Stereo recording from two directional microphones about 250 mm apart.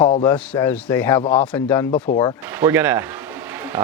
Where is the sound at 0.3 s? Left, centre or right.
Centre.